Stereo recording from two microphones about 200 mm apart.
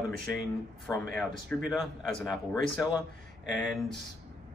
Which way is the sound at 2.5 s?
15° left (ahead or behind).